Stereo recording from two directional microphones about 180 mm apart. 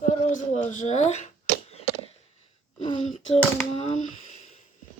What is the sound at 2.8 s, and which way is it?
Speech, 30° left (ahead or behind).